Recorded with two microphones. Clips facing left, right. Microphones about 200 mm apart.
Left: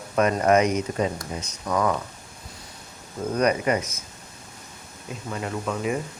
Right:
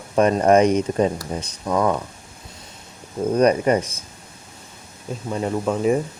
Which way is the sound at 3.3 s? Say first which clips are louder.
Right 5 dB; 30° right (ahead or behind).